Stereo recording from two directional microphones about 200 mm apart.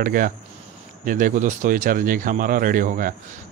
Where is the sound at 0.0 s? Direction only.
45° right (ahead or behind).